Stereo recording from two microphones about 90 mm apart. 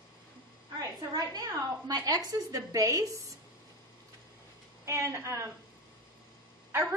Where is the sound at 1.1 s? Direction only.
45° right (ahead or behind).